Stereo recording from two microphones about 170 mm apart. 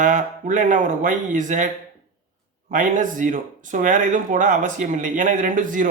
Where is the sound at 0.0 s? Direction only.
45° right (ahead or behind).